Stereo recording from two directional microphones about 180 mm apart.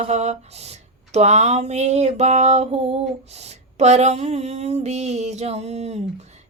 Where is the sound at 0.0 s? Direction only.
40° right (ahead or behind).